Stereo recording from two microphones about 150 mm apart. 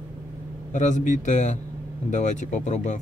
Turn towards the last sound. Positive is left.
turn(degrees=50)  # may be behind; listen again after turning